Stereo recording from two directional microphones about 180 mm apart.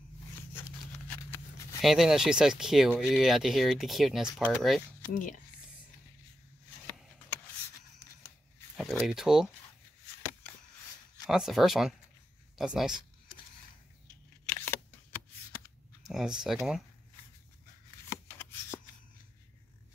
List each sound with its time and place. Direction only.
0.4 s a sound: 10° left (ahead or behind)
1.8 s speech: centre (ahead or behind)
5.0 s speech: 45° left (ahead or behind)
9.0 s speech: 5° right (ahead or behind)
11.2 s speech: 5° right (ahead or behind)
14.5 s a sound: 10° left (ahead or behind)
16.0 s speech: centre (ahead or behind)
18.3 s shuffling cards: 10° left (ahead or behind)